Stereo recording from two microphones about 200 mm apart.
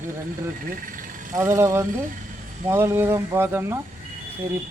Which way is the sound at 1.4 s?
15° right (ahead or behind).